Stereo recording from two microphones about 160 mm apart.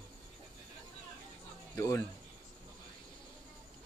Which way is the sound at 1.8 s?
20° left (ahead or behind).